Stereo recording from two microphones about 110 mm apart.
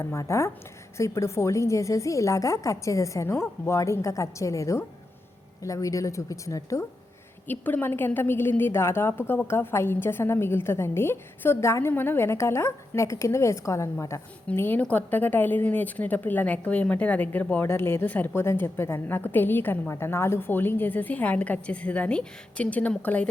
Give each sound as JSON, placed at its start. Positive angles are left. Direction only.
{"t": 0.0, "sound": "a woman's voice", "side_deg": 30}
{"t": 7.4, "sound": "a woman's voice", "side_deg": 15}